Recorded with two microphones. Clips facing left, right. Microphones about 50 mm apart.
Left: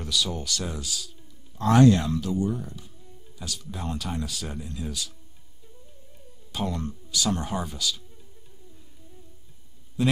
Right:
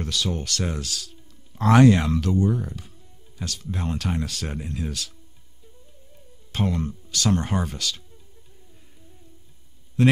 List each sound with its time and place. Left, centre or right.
0.0 s speech: right
1.6 s speech: right
3.4 s speech: right
4.3 s speech: right
6.6 s speech: right
7.1 s speech: right